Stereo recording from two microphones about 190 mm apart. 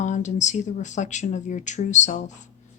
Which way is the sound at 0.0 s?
40° left (ahead or behind).